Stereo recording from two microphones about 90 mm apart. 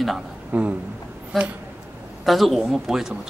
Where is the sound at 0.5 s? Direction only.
15° right (ahead or behind).